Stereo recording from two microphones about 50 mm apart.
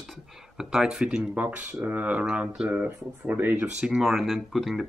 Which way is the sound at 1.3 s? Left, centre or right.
Right.